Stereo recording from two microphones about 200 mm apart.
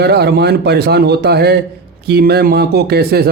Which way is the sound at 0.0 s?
55° right (ahead or behind).